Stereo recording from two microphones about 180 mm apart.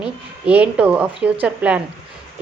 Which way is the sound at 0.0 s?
5° right (ahead or behind).